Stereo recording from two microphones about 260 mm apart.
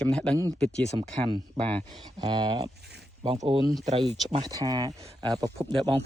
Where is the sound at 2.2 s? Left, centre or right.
Centre.